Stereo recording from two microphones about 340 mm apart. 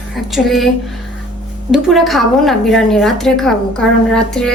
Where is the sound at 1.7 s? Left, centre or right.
Centre.